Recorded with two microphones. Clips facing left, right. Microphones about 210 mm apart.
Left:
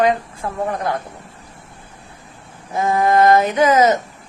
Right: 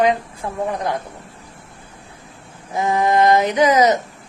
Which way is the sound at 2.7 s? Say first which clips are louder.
Left 1 dB; 15° right (ahead or behind).